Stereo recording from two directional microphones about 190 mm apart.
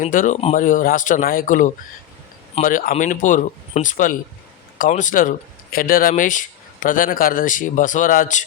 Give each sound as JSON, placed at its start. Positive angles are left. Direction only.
{"t": 0.0, "sound": "speech", "side_deg": 45}